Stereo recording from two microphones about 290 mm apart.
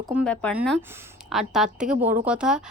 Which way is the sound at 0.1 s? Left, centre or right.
Centre.